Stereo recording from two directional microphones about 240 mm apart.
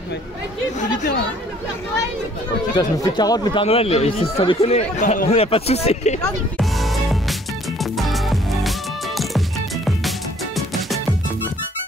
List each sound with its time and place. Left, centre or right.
0.7 s speech: left
2.7 s speech: centre
6.6 s music: centre